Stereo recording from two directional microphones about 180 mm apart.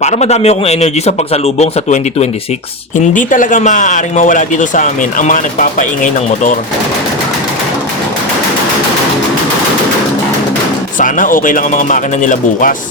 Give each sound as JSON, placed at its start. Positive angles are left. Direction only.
{"t": 0.0, "sound": "a man's voice", "side_deg": 40}
{"t": 11.0, "sound": "speech", "side_deg": 50}